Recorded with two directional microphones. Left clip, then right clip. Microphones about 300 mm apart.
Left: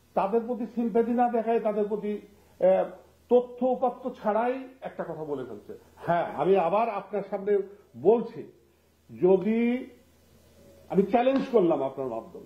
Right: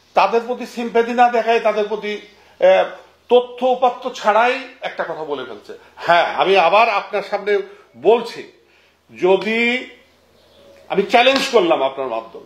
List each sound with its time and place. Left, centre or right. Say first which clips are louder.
0.1 s a man's voice: right 11 dB; centre
5.1 s speech: right 9 dB; right
5.9 s a man's voice: right 13 dB; centre
8.0 s speech: right 8 dB; right
9.2 s a man's voice: right 8 dB; centre
10.9 s a man's voice: right 10 dB; centre